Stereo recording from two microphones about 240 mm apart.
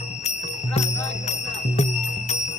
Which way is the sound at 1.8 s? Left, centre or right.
Left.